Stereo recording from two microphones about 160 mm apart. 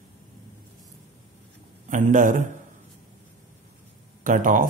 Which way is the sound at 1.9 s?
50° right (ahead or behind).